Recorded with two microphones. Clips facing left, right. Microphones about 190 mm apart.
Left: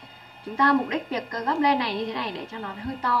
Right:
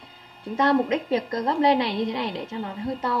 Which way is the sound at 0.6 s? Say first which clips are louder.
Right 2 dB; 25° right (ahead or behind).